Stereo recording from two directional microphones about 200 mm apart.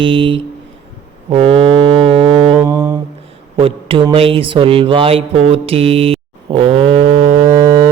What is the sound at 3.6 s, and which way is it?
Speech, 25° right (ahead or behind).